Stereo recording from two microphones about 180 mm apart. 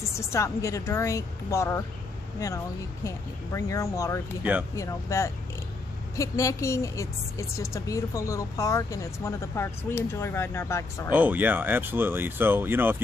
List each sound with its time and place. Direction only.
0.1 s a woman's voice: 15° left (ahead or behind)
4.4 s speech: 10° right (ahead or behind)
4.7 s a woman's voice: 15° left (ahead or behind)
11.1 s speech: 10° right (ahead or behind)